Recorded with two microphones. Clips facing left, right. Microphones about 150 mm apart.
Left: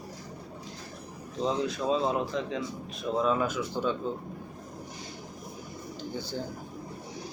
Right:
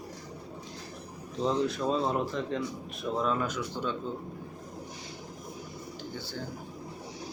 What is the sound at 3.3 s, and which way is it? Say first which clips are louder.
Speech: left 3 dB; 10° left (ahead or behind).